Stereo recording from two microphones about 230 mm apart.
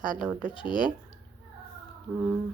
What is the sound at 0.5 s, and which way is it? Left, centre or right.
Speech, left.